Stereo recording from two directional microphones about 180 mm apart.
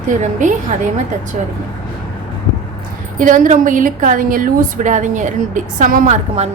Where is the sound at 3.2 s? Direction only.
45° right (ahead or behind).